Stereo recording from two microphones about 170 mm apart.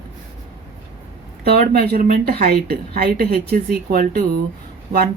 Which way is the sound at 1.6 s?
60° right (ahead or behind).